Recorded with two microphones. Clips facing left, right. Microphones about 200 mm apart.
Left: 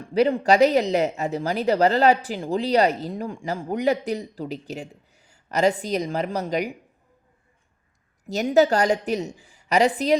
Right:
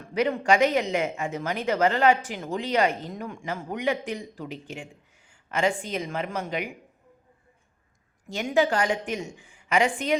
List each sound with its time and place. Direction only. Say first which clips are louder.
0.1 s speech: left 4 dB; 35° left (ahead or behind)
8.3 s speech: left 5 dB; 40° left (ahead or behind)